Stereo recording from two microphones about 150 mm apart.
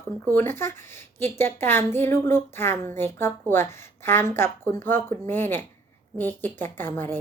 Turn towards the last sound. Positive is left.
turn(degrees=15)  # may be behind; listen again after turning